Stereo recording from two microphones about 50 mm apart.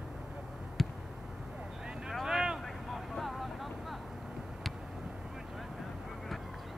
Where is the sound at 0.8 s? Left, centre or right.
Centre.